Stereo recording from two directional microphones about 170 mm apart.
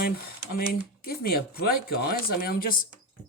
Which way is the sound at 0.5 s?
60° left (ahead or behind).